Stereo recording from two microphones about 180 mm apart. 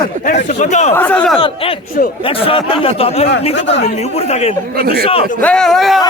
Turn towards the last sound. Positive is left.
turn(degrees=0)  # may be behind; listen again after turning